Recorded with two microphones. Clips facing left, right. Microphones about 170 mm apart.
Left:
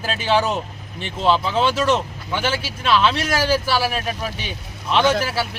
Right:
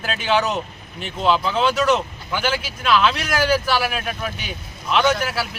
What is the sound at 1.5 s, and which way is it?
Speech, 25° left (ahead or behind).